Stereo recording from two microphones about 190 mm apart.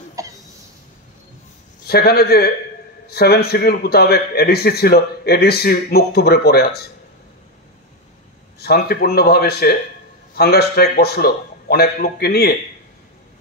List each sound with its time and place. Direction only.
0.2 s a sound: 15° right (ahead or behind)
1.9 s a man's voice: 55° left (ahead or behind)
8.5 s a man's voice: 55° left (ahead or behind)